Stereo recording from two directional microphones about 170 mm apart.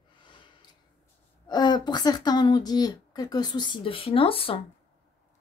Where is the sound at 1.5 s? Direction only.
25° left (ahead or behind).